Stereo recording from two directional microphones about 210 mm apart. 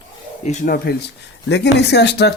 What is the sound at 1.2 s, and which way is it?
Speech, 55° left (ahead or behind).